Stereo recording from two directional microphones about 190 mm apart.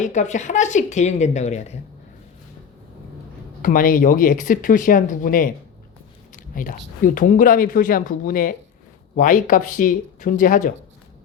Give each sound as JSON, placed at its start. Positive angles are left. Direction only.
{"t": 0.0, "sound": "speech", "side_deg": 40}
{"t": 3.6, "sound": "speech", "side_deg": 45}